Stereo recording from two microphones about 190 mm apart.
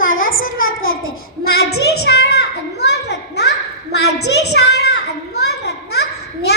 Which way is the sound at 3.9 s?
65° left (ahead or behind).